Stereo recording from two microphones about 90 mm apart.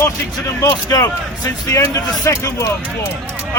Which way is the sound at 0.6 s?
40° left (ahead or behind).